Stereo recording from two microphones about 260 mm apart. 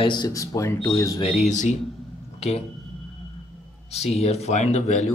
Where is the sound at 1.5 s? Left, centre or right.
Left.